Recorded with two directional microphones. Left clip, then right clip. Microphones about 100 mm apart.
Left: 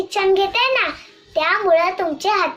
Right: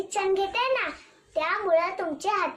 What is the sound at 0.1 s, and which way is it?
A child's voice, 35° right (ahead or behind).